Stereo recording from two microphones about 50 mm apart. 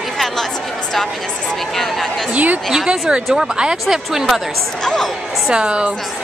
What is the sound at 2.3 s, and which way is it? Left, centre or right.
Speech, right.